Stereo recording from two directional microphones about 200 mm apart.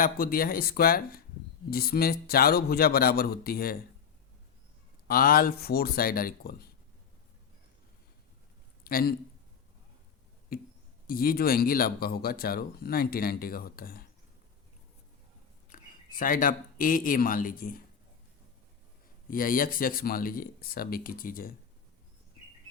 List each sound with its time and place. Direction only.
0.0 s speech: 45° left (ahead or behind)
5.0 s speech: 45° left (ahead or behind)
8.8 s a man's voice: 45° left (ahead or behind)
10.5 s speech: 50° left (ahead or behind)
15.7 s speech: 45° left (ahead or behind)
19.3 s speech: 45° left (ahead or behind)